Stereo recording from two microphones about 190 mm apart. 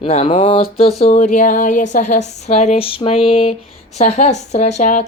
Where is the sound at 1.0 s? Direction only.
35° left (ahead or behind).